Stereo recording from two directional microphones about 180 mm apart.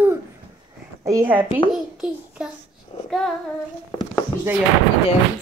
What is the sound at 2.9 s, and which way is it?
Child singing, 30° left (ahead or behind).